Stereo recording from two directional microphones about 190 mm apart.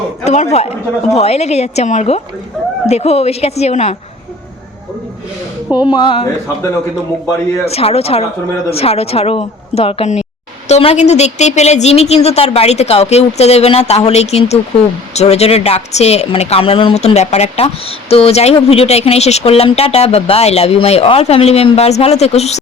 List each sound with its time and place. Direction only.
0.3 s speech: 35° left (ahead or behind)
5.7 s speech: 25° left (ahead or behind)
7.6 s speech: 30° left (ahead or behind)